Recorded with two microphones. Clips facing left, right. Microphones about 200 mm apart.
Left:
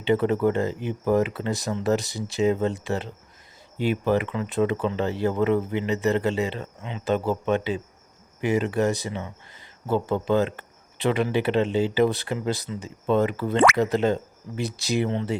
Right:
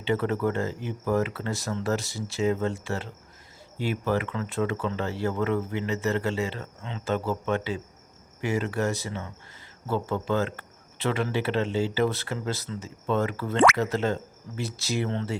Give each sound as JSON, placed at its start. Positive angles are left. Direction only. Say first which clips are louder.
{"t": 0.0, "sound": "speech", "louder": "left 5 dB", "side_deg": 20}